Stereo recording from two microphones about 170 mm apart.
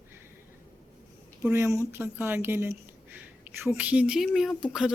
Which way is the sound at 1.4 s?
15° right (ahead or behind).